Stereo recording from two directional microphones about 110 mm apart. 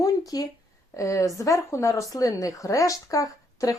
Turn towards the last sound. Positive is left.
turn(degrees=30)  # may be behind; listen again after turning